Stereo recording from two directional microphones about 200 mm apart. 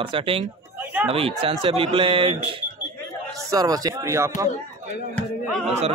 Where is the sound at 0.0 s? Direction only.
25° right (ahead or behind).